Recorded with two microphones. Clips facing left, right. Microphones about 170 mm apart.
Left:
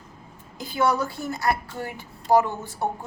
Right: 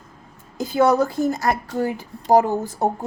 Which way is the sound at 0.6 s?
45° right (ahead or behind).